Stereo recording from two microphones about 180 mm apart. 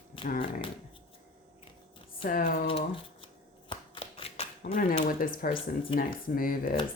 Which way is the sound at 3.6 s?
25° left (ahead or behind).